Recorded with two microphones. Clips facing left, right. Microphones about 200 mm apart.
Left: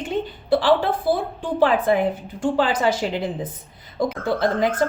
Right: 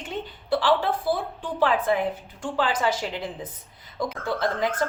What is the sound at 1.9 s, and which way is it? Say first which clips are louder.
A woman's voice: left 5 dB; 25° left (ahead or behind).